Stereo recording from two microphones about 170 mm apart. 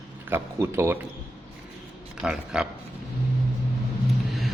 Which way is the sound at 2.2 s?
5° right (ahead or behind).